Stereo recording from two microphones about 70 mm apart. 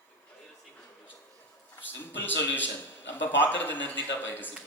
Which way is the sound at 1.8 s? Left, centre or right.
Left.